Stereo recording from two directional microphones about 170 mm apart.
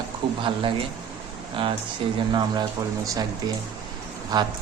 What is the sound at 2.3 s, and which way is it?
Speech, 25° right (ahead or behind).